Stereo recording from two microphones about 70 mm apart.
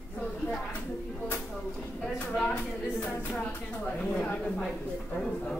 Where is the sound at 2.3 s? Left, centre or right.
Centre.